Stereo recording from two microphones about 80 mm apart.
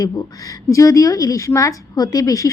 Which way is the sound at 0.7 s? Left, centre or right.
Left.